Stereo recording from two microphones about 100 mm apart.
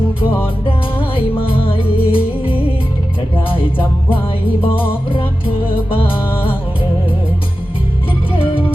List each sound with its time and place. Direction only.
0.9 s music: 65° left (ahead or behind)